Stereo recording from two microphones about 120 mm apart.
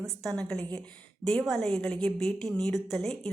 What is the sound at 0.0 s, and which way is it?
A woman's voice, 5° left (ahead or behind).